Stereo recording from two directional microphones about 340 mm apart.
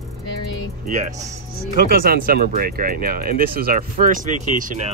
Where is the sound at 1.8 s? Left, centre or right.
Right.